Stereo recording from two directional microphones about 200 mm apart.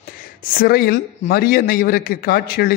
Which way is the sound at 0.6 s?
50° left (ahead or behind).